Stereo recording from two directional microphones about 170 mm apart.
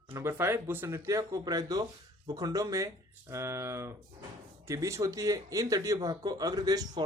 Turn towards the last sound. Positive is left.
turn(degrees=-20)  # may be behind; listen again after turning